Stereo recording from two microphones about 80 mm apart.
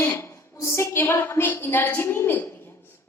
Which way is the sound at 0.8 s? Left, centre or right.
Left.